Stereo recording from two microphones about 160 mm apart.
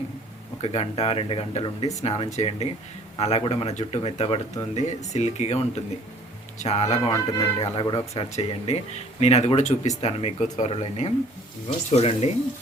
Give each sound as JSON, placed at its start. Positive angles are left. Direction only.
{"t": 0.6, "sound": "speech", "side_deg": 40}
{"t": 6.8, "sound": "a man's voice", "side_deg": 20}
{"t": 8.1, "sound": "speech", "side_deg": 40}